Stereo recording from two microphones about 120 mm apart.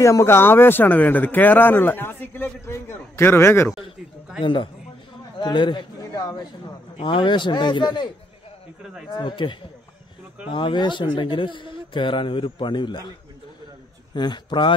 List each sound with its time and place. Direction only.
0.0 s speech: 25° left (ahead or behind)
4.4 s a man's voice: 45° left (ahead or behind)
9.1 s a man's voice: 40° left (ahead or behind)
14.1 s a man's voice: 40° left (ahead or behind)